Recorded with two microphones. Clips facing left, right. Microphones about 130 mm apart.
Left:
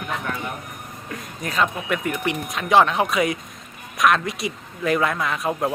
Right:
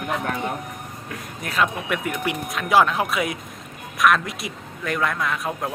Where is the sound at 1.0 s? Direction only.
Centre (ahead or behind).